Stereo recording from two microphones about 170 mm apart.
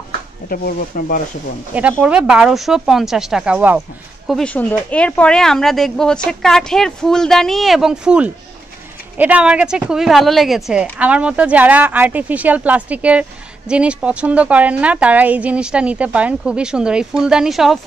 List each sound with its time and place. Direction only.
0.5 s speech: 60° left (ahead or behind)
1.7 s speech: 10° right (ahead or behind)
4.3 s speech: 5° left (ahead or behind)